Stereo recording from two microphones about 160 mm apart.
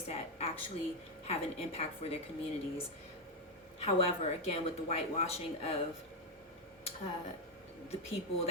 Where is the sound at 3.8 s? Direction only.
40° left (ahead or behind).